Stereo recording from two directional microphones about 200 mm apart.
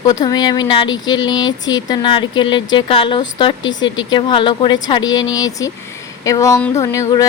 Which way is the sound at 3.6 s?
70° left (ahead or behind).